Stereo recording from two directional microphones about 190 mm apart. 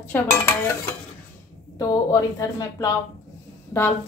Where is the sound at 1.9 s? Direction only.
20° left (ahead or behind).